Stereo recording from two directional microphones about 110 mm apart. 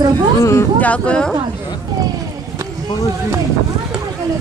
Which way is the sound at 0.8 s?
10° left (ahead or behind).